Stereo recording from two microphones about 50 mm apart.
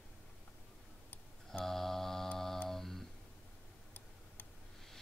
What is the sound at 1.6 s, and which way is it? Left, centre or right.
Speech, centre.